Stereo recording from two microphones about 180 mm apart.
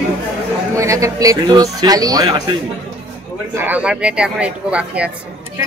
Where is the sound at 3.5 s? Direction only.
10° right (ahead or behind).